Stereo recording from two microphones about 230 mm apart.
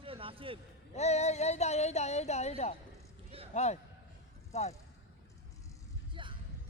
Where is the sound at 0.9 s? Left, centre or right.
Left.